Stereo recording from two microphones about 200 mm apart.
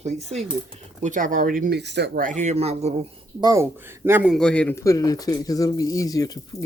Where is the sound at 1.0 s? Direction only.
40° right (ahead or behind).